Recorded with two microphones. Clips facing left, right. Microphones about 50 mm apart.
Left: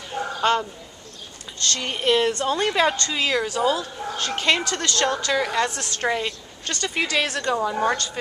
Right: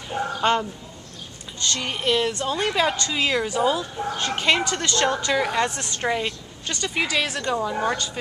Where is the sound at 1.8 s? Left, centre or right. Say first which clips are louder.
Left 3 dB; centre.